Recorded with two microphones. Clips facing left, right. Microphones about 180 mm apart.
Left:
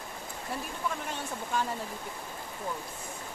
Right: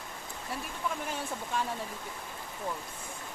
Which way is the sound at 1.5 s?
Centre (ahead or behind).